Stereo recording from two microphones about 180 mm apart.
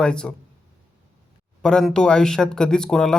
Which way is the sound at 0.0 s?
5° left (ahead or behind).